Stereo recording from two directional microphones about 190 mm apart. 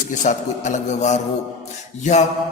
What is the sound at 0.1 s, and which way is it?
Speech, 40° left (ahead or behind).